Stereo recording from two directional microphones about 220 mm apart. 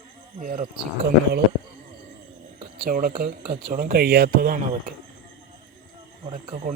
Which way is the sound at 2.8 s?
40° right (ahead or behind).